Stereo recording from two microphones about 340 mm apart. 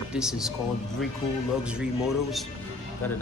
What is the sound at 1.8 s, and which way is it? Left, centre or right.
Speech, centre.